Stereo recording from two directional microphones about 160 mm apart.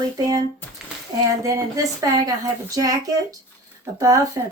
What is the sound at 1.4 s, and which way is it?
Speech, 20° right (ahead or behind).